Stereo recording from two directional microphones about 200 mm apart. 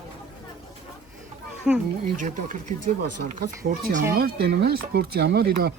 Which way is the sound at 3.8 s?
40° right (ahead or behind).